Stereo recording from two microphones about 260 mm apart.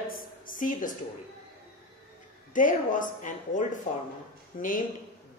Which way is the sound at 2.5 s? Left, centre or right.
Left.